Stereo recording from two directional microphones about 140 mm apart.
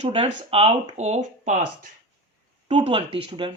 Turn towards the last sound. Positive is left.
turn(degrees=-40)  # may be behind; listen again after turning